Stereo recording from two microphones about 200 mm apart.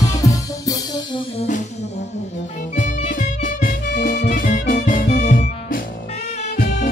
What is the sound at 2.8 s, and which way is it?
Music, 40° left (ahead or behind).